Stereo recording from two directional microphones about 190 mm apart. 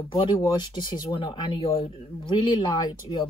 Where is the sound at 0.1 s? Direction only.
25° left (ahead or behind).